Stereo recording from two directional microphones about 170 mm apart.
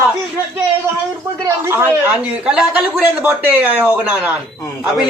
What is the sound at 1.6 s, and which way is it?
A man's voice, 15° right (ahead or behind).